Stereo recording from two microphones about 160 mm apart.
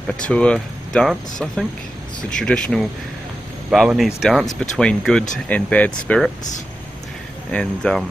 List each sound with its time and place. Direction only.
0.2 s speech: 5° left (ahead or behind)
7.5 s speech: 5° left (ahead or behind)